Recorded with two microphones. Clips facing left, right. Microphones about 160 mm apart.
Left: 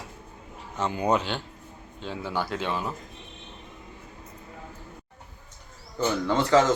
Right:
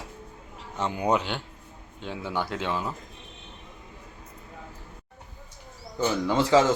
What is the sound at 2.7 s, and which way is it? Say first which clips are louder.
Speech: even; 20° left (ahead or behind).